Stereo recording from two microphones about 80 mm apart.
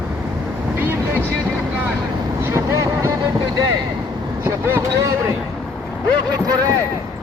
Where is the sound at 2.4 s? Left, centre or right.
Right.